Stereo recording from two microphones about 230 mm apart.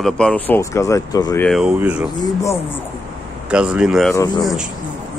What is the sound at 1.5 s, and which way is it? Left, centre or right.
Speech, centre.